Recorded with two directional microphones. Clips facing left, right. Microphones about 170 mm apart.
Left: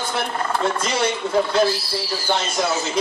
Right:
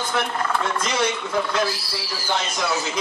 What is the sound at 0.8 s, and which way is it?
Speech, 30° left (ahead or behind).